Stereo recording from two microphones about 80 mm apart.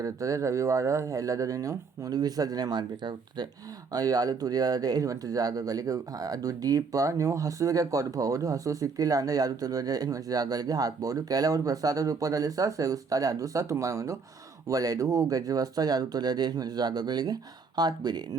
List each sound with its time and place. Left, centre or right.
0.0 s speech: right